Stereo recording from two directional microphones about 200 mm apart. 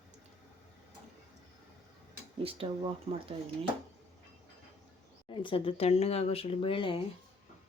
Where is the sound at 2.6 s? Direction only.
30° right (ahead or behind).